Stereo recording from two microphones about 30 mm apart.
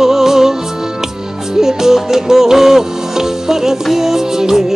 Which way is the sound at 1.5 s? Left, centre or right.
Centre.